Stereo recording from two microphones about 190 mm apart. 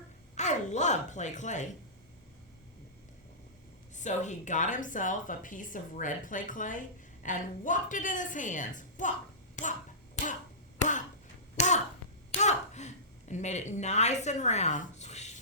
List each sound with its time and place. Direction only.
0.3 s speech: 40° left (ahead or behind)
3.9 s speech: 40° left (ahead or behind)
10.2 s finger snapping: 35° left (ahead or behind)
11.5 s throat clearing: 40° left (ahead or behind)
12.3 s a sound: 35° left (ahead or behind)